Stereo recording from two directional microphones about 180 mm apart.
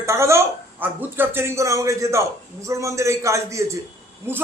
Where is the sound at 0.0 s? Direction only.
15° right (ahead or behind).